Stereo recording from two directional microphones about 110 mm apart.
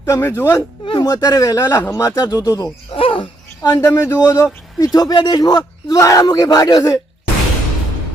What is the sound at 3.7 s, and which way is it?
A man's voice, 20° left (ahead or behind).